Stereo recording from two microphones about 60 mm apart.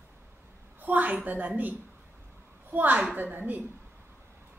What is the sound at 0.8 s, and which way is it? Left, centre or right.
Speech, right.